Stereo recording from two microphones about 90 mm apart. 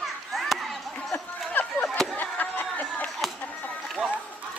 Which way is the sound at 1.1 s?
20° left (ahead or behind).